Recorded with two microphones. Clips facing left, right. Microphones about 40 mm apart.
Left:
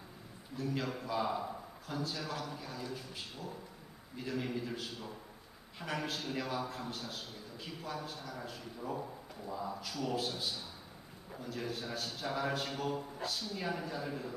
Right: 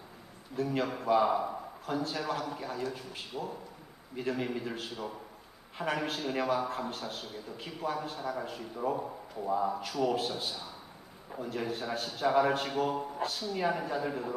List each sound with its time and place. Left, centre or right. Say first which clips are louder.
0.6 s a man's voice: right 6 dB; right